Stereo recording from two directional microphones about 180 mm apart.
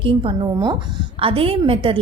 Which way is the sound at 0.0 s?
30° right (ahead or behind).